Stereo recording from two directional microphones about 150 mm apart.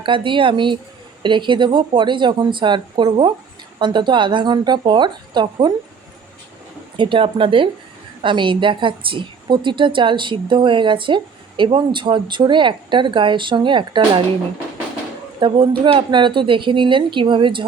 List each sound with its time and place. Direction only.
0.0 s a woman's voice: 35° right (ahead or behind)
6.9 s a woman's voice: 35° right (ahead or behind)
15.4 s a woman's voice: 35° right (ahead or behind)